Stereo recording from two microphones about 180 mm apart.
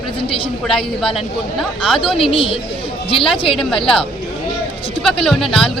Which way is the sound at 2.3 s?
30° left (ahead or behind).